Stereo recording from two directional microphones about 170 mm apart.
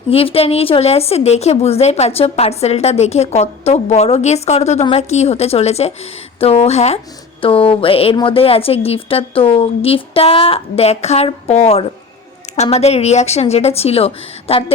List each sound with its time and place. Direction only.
0.1 s a woman's voice: 35° left (ahead or behind)